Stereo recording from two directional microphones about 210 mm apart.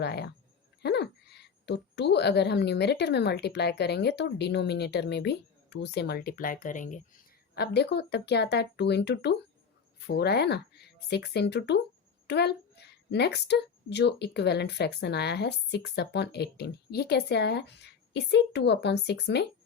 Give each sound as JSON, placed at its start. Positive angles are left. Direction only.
{"t": 0.0, "sound": "a child's voice", "side_deg": 50}
{"t": 7.5, "sound": "a child's voice", "side_deg": 50}